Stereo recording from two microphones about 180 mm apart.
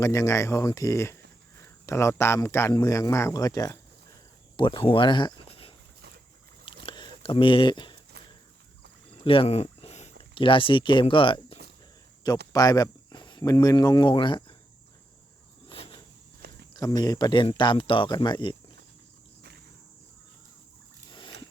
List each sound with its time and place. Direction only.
0.0 s speech: 20° left (ahead or behind)
6.8 s a sound: 25° left (ahead or behind)
9.2 s speech: 30° left (ahead or behind)
12.5 s speech: 20° left (ahead or behind)
15.7 s cricket: 30° left (ahead or behind)
16.4 s walk: 60° right (ahead or behind)
17.0 s speech: 25° left (ahead or behind)
21.1 s a sound: 25° left (ahead or behind)